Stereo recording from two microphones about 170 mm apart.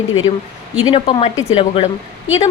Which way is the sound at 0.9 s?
35° left (ahead or behind).